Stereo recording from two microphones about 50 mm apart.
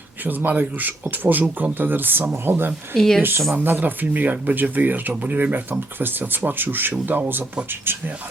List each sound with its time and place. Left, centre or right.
0.3 s speech: right
2.9 s speech: centre
3.2 s speech: right